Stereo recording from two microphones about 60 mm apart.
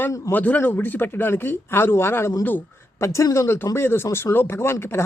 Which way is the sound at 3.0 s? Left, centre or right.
Left.